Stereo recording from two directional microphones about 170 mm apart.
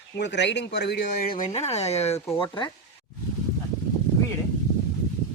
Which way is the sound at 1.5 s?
40° left (ahead or behind).